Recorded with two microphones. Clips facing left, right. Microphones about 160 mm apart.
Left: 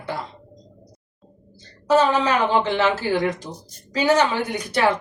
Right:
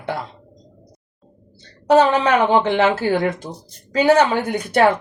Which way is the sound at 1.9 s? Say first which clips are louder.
Right 4 dB; 65° right (ahead or behind).